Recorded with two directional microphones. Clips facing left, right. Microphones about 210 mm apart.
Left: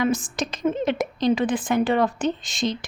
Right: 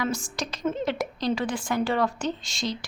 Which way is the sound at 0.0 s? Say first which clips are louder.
Left 6 dB; 20° left (ahead or behind).